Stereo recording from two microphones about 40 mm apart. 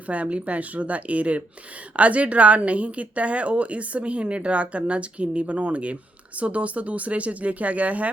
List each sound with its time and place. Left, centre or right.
0.1 s speech: right